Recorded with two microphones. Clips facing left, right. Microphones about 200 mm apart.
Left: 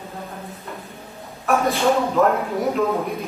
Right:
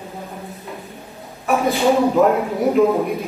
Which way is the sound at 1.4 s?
Centre (ahead or behind).